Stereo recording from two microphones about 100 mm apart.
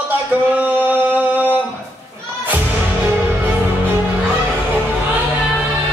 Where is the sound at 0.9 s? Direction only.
15° right (ahead or behind).